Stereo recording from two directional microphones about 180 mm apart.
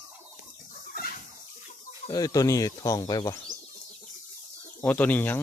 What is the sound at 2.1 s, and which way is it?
Speech, 20° left (ahead or behind).